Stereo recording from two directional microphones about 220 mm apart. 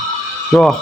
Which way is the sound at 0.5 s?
Centre (ahead or behind).